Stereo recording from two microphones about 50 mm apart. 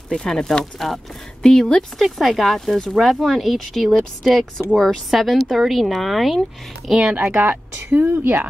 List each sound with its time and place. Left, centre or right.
0.1 s speech: centre
2.0 s speech: centre
7.1 s a woman's voice: right
7.3 s a woman's voice: right